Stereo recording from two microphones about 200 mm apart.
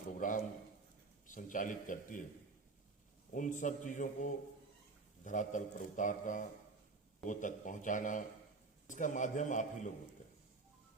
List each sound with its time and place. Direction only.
0.2 s a man's voice: 40° left (ahead or behind)
3.3 s a man's voice: 40° left (ahead or behind)